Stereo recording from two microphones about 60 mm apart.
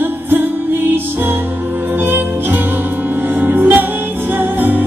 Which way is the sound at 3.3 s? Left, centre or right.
Right.